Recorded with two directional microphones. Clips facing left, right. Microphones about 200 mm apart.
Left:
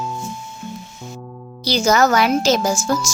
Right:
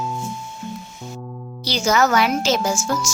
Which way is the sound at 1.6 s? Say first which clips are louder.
Left 3 dB; 40° left (ahead or behind).